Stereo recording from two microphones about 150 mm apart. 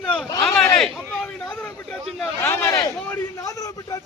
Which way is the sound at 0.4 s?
5° left (ahead or behind).